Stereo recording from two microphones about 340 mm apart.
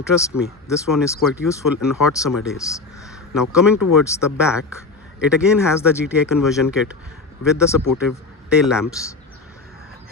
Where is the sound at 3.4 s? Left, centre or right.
Left.